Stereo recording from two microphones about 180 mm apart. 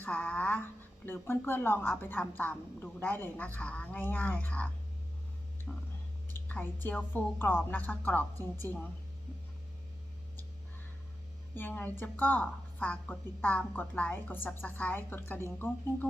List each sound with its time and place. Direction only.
0.0 s a woman's voice: 10° left (ahead or behind)
11.5 s a woman's voice: 10° left (ahead or behind)